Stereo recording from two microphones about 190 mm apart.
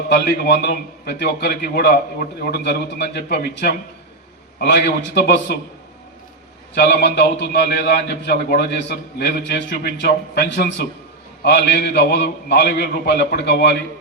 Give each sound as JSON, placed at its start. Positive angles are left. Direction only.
{"t": 0.1, "sound": "a man's voice", "side_deg": 60}
{"t": 7.0, "sound": "a man's voice", "side_deg": 60}